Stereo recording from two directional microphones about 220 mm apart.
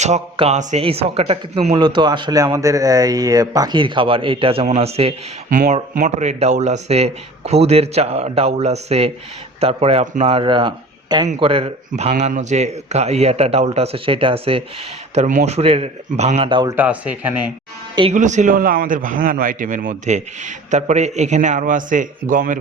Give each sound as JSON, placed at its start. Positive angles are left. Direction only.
{"t": 0.0, "sound": "a man's voice", "side_deg": -30}
{"t": 16.7, "sound": "speech", "side_deg": -5}
{"t": 18.1, "sound": "a man's voice", "side_deg": -35}